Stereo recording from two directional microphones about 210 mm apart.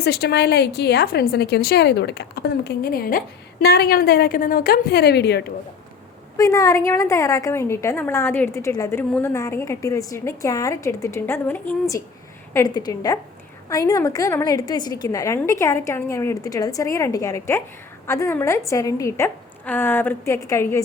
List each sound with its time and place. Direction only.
0.0 s a woman's voice: 50° left (ahead or behind)
6.3 s a woman's voice: 15° left (ahead or behind)